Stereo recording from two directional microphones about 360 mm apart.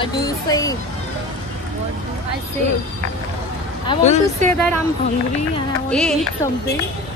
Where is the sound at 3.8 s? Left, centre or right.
Centre.